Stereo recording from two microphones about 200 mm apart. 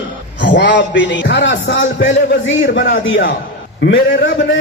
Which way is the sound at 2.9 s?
70° left (ahead or behind).